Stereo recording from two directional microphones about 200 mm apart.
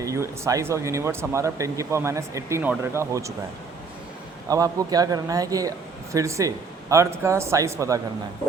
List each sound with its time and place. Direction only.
0.0 s speech: 15° right (ahead or behind)
4.4 s speech: 15° right (ahead or behind)